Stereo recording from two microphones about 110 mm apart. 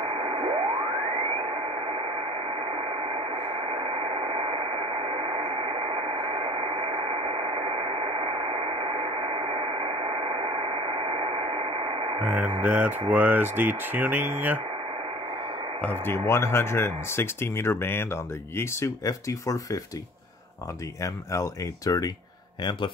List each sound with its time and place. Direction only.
0.0 s radio: 55° right (ahead or behind)
12.3 s speech: 15° right (ahead or behind)
15.8 s speech: 20° left (ahead or behind)
21.0 s speech: 30° left (ahead or behind)